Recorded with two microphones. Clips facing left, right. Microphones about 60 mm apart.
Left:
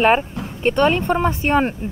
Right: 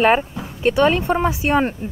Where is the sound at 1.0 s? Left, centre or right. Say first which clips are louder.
Even; centre.